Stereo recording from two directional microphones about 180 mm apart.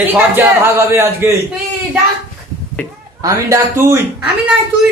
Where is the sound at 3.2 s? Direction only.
15° right (ahead or behind).